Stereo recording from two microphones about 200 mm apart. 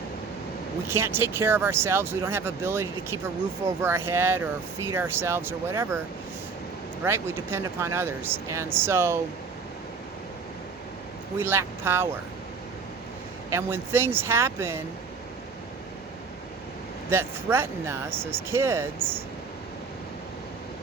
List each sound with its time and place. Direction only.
0.9 s speech: 10° right (ahead or behind)
7.0 s speech: 10° right (ahead or behind)
11.3 s speech: 10° right (ahead or behind)
13.5 s speech: 15° right (ahead or behind)
17.1 s speech: 10° right (ahead or behind)